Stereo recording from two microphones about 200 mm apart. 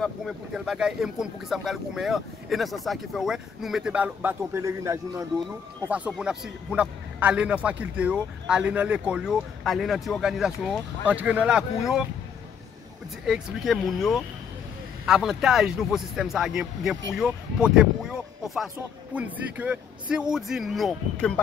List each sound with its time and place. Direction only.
0.0 s a man's voice: centre (ahead or behind)
13.2 s speech: centre (ahead or behind)